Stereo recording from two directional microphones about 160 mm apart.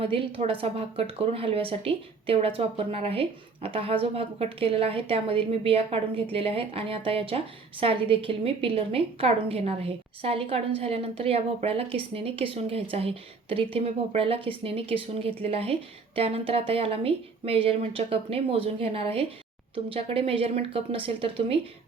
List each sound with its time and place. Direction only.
0.0 s a woman's voice: 35° right (ahead or behind)